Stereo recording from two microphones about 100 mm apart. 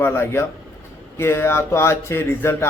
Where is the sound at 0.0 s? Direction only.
25° left (ahead or behind).